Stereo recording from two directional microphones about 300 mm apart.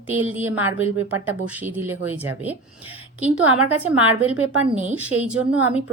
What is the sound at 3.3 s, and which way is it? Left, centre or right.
Speech, right.